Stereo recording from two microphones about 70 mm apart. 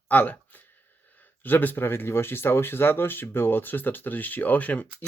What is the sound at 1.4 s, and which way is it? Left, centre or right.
Speech, left.